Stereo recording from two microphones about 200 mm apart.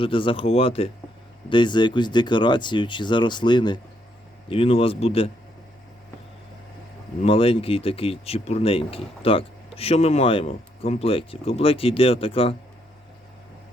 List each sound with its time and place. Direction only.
0.0 s speech: 25° left (ahead or behind)
7.2 s speech: 30° left (ahead or behind)